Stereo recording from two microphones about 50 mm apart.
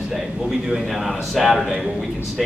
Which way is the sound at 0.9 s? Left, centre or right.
Centre.